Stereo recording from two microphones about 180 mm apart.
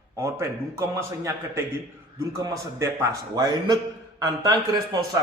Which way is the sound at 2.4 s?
20° right (ahead or behind).